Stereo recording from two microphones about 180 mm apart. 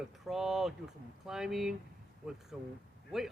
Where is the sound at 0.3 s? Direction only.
Centre (ahead or behind).